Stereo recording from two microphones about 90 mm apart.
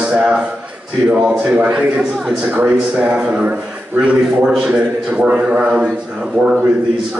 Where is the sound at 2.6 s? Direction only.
15° right (ahead or behind).